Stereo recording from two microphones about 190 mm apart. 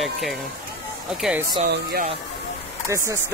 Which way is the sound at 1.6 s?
50° right (ahead or behind).